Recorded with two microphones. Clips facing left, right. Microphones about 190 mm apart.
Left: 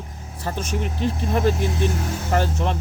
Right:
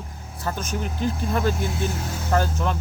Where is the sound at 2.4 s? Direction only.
30° left (ahead or behind).